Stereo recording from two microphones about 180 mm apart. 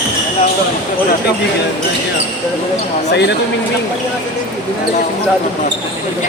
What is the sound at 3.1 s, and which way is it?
Speech, 70° left (ahead or behind).